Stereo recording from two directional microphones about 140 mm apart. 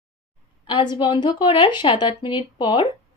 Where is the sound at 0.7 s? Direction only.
35° left (ahead or behind).